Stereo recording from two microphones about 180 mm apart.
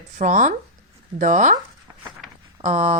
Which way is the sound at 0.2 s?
45° right (ahead or behind).